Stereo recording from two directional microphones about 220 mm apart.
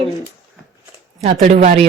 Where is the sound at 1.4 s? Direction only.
35° right (ahead or behind).